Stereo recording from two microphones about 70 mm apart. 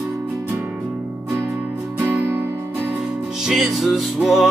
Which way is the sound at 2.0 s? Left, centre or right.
Right.